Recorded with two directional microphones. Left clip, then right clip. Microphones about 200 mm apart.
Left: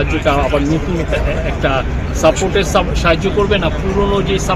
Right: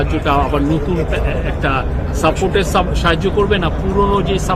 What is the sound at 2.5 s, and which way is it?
Speech, 30° right (ahead or behind).